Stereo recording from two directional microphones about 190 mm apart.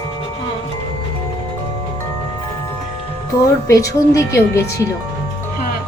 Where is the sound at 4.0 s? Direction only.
15° left (ahead or behind).